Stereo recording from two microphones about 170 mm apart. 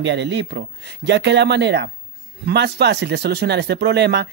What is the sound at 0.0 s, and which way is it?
Speech, 90° right.